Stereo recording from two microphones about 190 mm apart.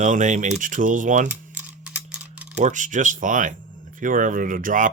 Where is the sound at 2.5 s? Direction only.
40° right (ahead or behind).